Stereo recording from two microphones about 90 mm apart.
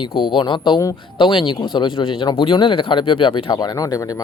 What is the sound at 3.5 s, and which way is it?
Speech, 45° left (ahead or behind).